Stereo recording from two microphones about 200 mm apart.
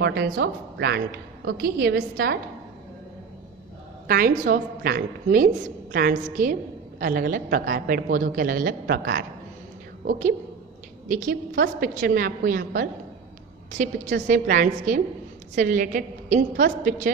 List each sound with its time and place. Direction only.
0.0 s a woman's voice: 55° right (ahead or behind)
4.1 s a woman's voice: 45° right (ahead or behind)